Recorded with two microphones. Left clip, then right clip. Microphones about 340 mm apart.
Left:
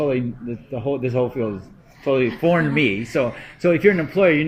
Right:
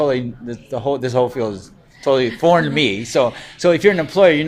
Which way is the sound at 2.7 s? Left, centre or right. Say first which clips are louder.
Right 2 dB; right.